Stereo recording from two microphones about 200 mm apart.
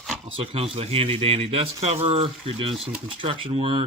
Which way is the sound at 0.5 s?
30° right (ahead or behind).